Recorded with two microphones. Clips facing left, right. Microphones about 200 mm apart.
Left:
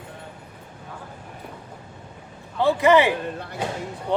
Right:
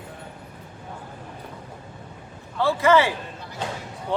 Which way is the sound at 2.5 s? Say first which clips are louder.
Left 2 dB; 20° left (ahead or behind).